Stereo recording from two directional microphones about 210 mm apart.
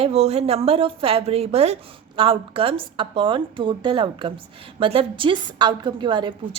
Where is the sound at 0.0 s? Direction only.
30° right (ahead or behind).